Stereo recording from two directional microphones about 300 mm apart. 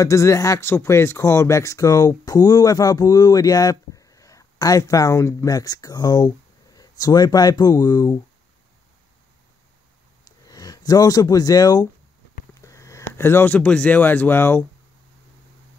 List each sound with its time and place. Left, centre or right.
0.0 s speech: centre
10.2 s speech: centre